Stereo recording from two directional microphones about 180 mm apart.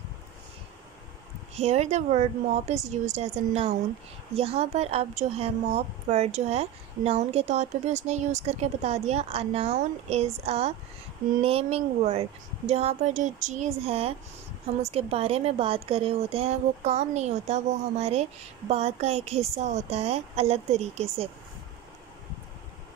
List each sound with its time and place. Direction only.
1.6 s a woman's voice: 40° right (ahead or behind)